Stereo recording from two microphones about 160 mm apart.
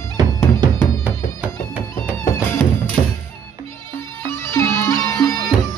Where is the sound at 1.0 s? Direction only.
10° right (ahead or behind).